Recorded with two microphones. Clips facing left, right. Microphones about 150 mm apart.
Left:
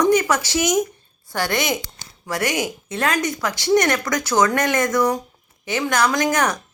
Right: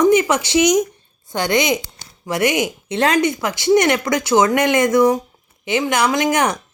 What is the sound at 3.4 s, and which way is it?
Speech, 10° right (ahead or behind).